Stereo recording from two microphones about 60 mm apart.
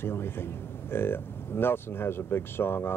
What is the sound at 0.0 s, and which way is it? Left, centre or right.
Speech, left.